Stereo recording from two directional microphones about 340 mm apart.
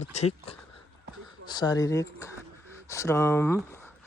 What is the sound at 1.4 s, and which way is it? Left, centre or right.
Speech, centre.